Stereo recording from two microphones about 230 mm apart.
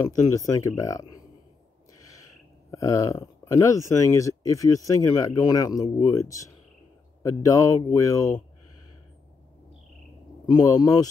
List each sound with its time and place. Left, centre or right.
0.4 s speech: centre
2.7 s speech: centre
10.4 s speech: centre